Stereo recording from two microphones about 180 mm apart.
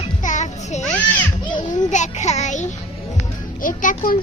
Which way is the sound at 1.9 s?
40° left (ahead or behind).